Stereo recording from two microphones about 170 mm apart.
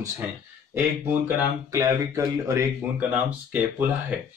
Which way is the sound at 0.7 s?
15° right (ahead or behind).